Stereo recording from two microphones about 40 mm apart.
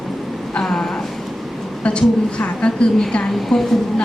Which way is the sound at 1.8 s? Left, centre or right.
Left.